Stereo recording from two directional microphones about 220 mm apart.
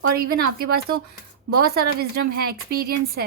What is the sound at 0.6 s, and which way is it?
Speech, 45° right (ahead or behind).